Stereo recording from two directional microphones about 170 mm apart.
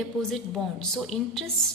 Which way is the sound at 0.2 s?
Centre (ahead or behind).